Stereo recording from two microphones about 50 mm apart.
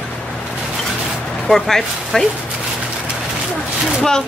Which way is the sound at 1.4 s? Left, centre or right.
Centre.